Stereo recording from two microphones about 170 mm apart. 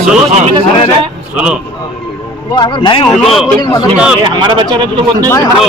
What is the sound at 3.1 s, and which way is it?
Speech, centre (ahead or behind).